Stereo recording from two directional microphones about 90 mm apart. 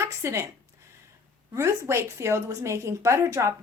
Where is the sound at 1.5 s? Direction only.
30° right (ahead or behind).